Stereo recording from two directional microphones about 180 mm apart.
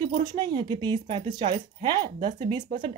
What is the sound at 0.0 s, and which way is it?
Speech, 25° right (ahead or behind).